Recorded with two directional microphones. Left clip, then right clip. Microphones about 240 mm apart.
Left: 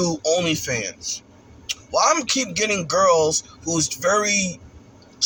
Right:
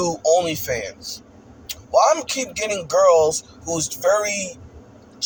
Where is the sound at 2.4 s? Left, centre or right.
Centre.